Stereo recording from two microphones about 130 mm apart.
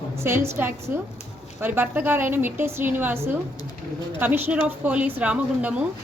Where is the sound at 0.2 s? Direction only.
20° right (ahead or behind).